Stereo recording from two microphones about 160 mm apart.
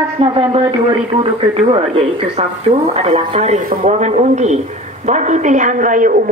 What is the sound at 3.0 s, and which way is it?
A woman's voice, 45° right (ahead or behind).